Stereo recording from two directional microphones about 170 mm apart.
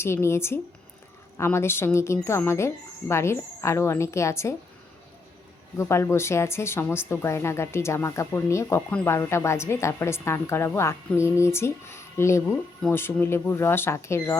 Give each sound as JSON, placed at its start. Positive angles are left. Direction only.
{"t": 0.0, "sound": "a woman's voice", "side_deg": 15}
{"t": 5.7, "sound": "a woman's voice", "side_deg": 15}